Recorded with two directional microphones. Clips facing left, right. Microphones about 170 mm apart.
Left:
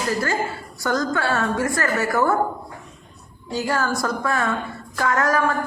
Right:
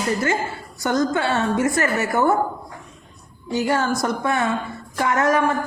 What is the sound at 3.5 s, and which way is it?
Speech, 20° right (ahead or behind).